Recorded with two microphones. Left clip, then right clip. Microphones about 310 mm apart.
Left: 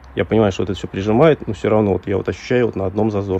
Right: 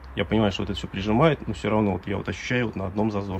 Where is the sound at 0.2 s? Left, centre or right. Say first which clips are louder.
Left 8 dB; left.